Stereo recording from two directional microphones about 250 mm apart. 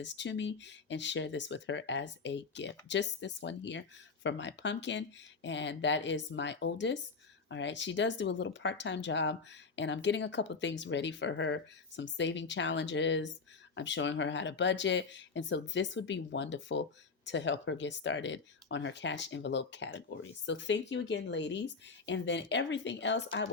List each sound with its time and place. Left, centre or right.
0.0 s speech: left